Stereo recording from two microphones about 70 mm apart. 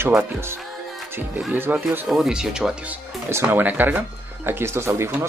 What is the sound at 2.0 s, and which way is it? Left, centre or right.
Speech, centre.